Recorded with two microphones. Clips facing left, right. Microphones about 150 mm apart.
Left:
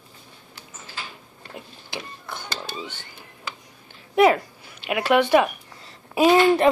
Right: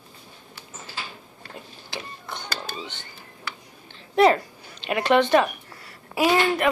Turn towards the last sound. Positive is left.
turn(degrees=20)  # may be behind; listen again after turning